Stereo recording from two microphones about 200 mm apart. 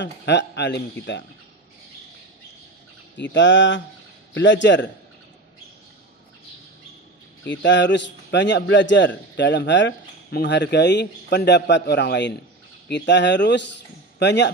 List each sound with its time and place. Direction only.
0.0 s a man's voice: 60° left (ahead or behind)
3.2 s a man's voice: 65° left (ahead or behind)
7.4 s a man's voice: 65° left (ahead or behind)